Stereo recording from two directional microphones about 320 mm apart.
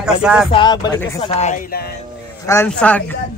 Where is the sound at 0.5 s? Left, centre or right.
Centre.